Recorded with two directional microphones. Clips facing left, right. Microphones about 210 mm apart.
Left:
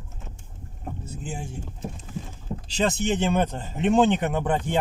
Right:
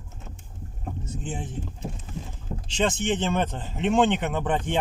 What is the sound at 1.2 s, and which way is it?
Speech, 10° left (ahead or behind).